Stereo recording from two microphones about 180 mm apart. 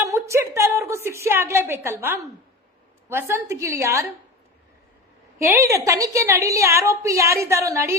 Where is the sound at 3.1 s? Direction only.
15° right (ahead or behind).